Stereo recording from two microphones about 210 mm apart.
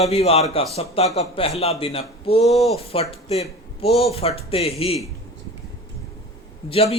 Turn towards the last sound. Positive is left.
turn(degrees=25)  # may be behind; listen again after turning